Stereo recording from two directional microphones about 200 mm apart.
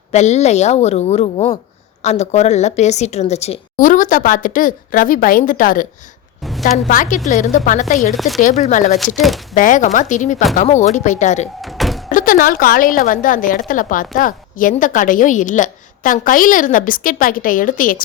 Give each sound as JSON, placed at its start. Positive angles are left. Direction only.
{"t": 0.1, "sound": "a woman's voice", "side_deg": 35}
{"t": 8.1, "sound": "speech", "side_deg": 0}
{"t": 8.4, "sound": "a woman's voice", "side_deg": 40}
{"t": 11.6, "sound": "thunk", "side_deg": 0}
{"t": 12.0, "sound": "a woman's voice", "side_deg": 40}